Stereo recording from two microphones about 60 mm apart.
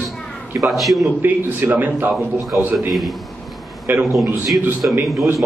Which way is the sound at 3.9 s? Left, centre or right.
Right.